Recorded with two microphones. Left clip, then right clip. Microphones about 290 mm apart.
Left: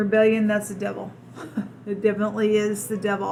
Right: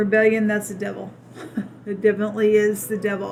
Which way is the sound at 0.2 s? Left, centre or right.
Right.